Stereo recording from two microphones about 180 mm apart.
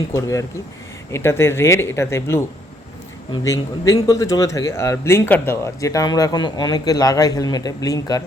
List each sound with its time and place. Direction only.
0.1 s speech: 15° left (ahead or behind)
3.4 s speech: 15° left (ahead or behind)